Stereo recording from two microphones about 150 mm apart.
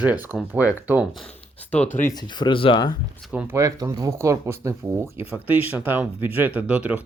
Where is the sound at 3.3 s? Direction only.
20° right (ahead or behind).